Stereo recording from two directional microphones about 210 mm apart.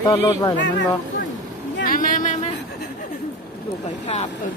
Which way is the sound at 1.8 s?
40° left (ahead or behind).